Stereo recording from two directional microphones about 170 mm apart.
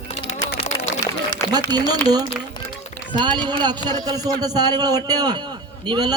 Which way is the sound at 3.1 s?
25° right (ahead or behind).